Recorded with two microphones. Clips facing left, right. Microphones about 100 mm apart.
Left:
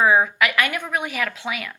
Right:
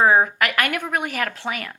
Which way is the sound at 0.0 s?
40° right (ahead or behind).